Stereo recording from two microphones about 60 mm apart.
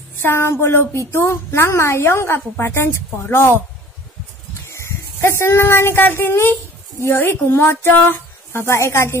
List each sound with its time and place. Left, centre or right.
0.2 s a woman's voice: left
4.6 s a sound: left
6.0 s a woman's voice: left